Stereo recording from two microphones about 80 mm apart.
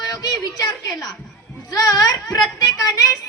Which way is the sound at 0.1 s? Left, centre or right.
Left.